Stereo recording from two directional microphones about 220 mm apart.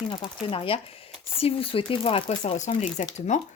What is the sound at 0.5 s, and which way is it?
A woman's voice, 25° left (ahead or behind).